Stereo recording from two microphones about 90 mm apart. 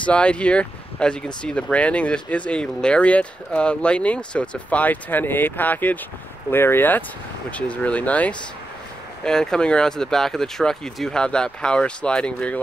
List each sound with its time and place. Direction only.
0.0 s speech: 10° left (ahead or behind)